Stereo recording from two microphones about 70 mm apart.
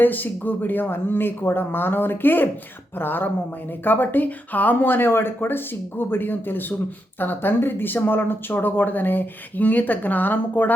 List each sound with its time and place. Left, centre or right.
0.0 s speech: left